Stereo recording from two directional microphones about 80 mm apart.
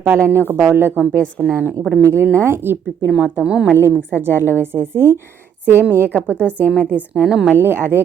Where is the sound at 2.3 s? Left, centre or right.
Right.